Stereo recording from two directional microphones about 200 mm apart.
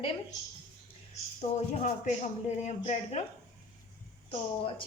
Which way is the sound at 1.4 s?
35° left (ahead or behind).